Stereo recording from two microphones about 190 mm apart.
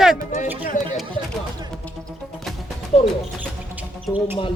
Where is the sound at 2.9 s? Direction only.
35° left (ahead or behind).